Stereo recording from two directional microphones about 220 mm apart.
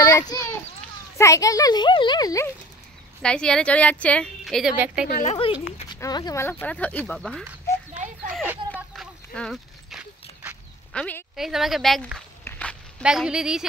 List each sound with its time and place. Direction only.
0.3 s speech: 20° left (ahead or behind)
3.2 s a woman's voice: 5° left (ahead or behind)
5.0 s speech: 35° left (ahead or behind)
5.9 s speech: 20° left (ahead or behind); by 7.4 s centre (ahead or behind)
8.3 s a sound: centre (ahead or behind)
13.0 s a woman's voice: 5° right (ahead or behind)